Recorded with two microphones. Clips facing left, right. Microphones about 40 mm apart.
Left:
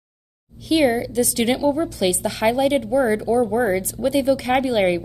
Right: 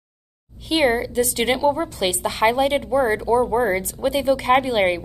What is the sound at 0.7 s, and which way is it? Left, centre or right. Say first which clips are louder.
A woman's voice: left 1 dB; right.